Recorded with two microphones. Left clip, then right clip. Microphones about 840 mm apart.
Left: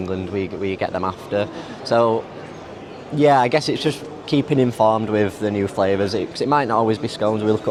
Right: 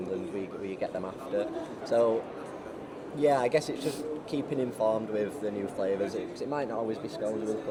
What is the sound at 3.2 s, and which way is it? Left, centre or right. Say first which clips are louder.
Speech: left 10 dB; left.